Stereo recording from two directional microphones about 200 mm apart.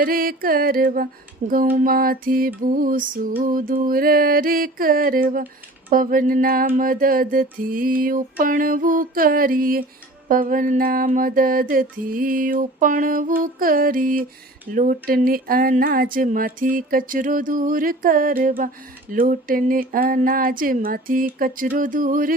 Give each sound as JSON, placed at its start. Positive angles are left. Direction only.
{"t": 0.0, "sound": "mantra", "side_deg": -45}